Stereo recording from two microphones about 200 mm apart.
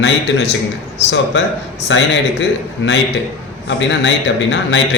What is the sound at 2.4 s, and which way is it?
A man's voice, 65° left (ahead or behind).